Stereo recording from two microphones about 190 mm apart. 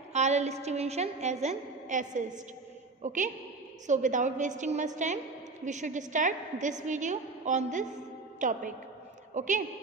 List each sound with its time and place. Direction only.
0.1 s a woman's voice: 35° right (ahead or behind)